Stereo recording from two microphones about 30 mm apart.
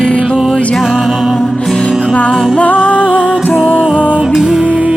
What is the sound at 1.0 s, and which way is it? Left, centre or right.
Music, centre.